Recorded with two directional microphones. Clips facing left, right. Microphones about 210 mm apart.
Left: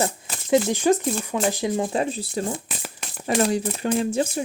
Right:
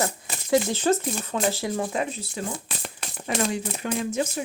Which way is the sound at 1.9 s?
30° left (ahead or behind).